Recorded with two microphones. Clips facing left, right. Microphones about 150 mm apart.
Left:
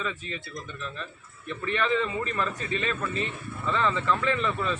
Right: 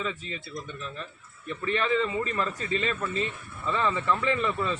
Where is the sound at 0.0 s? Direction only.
20° right (ahead or behind).